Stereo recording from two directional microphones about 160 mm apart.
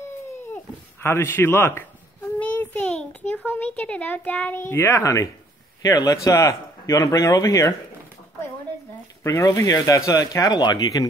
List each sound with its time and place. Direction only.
1.0 s a sound: 15° left (ahead or behind)
3.4 s a child's voice: 10° left (ahead or behind)
9.2 s speech: 20° left (ahead or behind)